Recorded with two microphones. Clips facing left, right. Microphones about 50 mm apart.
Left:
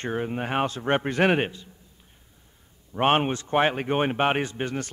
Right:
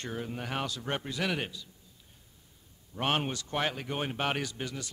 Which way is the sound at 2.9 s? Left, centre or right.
Left.